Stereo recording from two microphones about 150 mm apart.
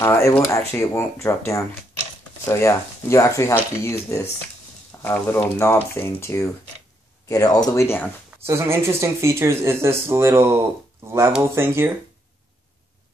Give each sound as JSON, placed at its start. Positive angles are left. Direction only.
{"t": 0.0, "sound": "speech", "side_deg": 15}
{"t": 8.5, "sound": "speech", "side_deg": -20}